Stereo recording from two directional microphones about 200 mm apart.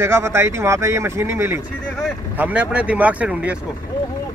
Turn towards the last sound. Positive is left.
turn(degrees=-5)  # may be behind; listen again after turning